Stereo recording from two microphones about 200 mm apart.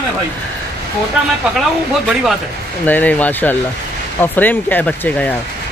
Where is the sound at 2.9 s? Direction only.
10° left (ahead or behind).